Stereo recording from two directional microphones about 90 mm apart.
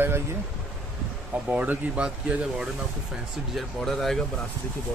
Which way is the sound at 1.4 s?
20° right (ahead or behind).